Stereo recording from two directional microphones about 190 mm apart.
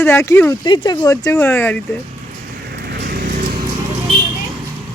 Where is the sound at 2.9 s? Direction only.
55° right (ahead or behind).